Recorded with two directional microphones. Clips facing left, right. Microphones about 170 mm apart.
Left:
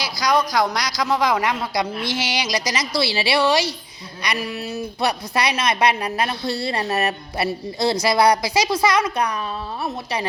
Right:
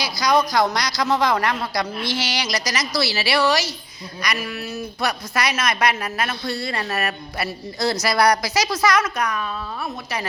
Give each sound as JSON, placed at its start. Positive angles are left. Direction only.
{"t": 0.0, "sound": "a man's voice", "side_deg": 10}
{"t": 4.7, "sound": "speech", "side_deg": 30}